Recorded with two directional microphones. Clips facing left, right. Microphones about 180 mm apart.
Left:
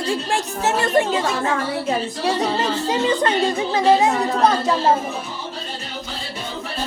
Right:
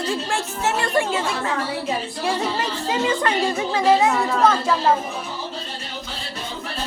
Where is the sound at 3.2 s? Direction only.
20° left (ahead or behind).